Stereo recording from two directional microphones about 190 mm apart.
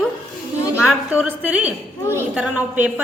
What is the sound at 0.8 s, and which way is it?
A woman's voice, 5° right (ahead or behind).